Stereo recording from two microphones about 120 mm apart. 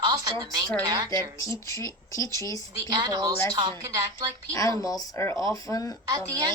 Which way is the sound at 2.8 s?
35° right (ahead or behind).